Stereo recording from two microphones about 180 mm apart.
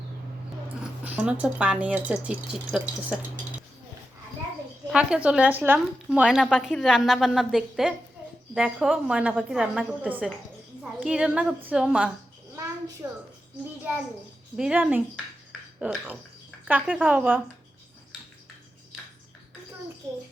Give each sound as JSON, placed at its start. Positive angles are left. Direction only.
{"t": 1.0, "sound": "speech", "side_deg": -5}
{"t": 4.9, "sound": "a woman's voice", "side_deg": -5}
{"t": 13.0, "sound": "a woman's voice", "side_deg": -20}
{"t": 14.5, "sound": "a woman's voice", "side_deg": -5}